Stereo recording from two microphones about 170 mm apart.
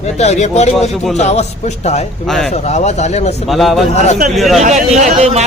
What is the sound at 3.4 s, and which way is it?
Speech, centre (ahead or behind).